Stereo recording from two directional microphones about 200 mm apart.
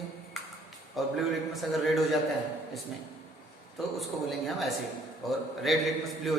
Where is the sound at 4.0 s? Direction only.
Centre (ahead or behind).